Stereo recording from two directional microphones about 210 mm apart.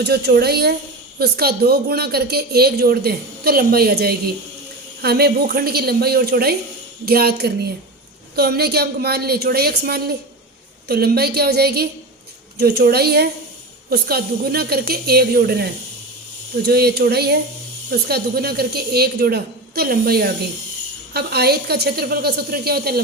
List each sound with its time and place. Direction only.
0.0 s speech: 50° right (ahead or behind)
16.6 s speech: 50° right (ahead or behind)